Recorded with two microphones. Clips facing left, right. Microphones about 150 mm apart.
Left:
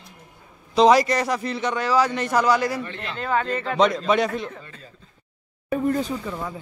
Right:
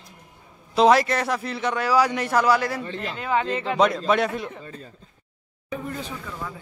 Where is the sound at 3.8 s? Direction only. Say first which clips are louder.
Left 1 dB; centre (ahead or behind).